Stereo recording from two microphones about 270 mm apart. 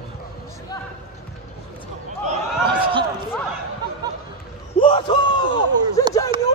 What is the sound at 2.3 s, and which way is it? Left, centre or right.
Speech, centre.